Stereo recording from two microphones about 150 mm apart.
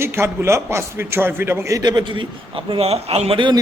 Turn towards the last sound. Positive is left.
turn(degrees=-35)  # may be behind; listen again after turning